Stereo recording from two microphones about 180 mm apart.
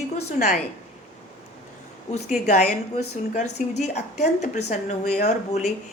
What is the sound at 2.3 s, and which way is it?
A woman's voice, 40° left (ahead or behind).